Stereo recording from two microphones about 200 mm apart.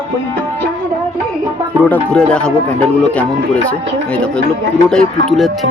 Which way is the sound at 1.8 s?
5° left (ahead or behind).